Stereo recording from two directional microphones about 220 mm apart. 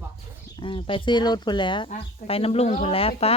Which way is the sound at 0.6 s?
20° left (ahead or behind).